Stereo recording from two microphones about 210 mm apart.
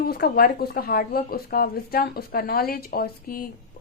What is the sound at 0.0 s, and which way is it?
Speech, 45° left (ahead or behind).